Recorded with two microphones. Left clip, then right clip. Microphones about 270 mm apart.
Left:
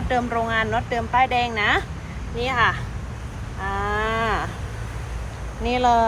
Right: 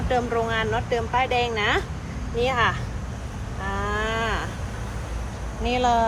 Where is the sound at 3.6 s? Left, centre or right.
Centre.